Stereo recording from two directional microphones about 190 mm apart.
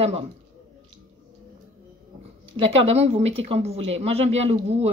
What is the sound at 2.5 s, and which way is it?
Speech, 30° right (ahead or behind).